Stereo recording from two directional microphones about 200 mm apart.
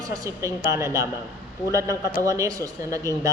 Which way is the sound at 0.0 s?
15° right (ahead or behind).